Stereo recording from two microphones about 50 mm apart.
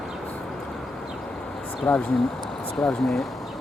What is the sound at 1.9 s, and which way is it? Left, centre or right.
Speech, left.